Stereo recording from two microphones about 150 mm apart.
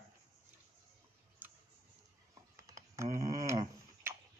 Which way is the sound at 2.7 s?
20° right (ahead or behind).